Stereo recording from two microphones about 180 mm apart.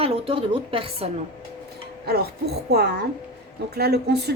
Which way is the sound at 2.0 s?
60° right (ahead or behind).